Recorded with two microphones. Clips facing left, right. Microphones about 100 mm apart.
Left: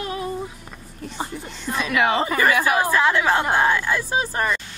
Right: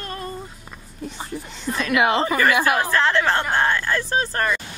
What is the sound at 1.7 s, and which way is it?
Speech, centre (ahead or behind).